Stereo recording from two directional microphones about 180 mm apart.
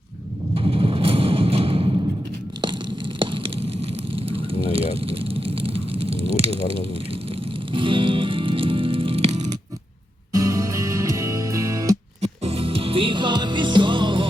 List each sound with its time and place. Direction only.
0.5 s a sound: 30° right (ahead or behind)
3.2 s fire: 30° right (ahead or behind)
7.7 s music: 30° right (ahead or behind)
10.3 s music: 20° right (ahead or behind)
12.2 s music: 35° right (ahead or behind)